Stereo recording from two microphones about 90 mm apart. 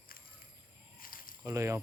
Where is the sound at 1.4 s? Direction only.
35° right (ahead or behind).